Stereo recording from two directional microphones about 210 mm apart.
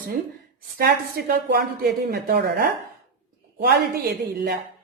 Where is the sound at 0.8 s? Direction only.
45° right (ahead or behind).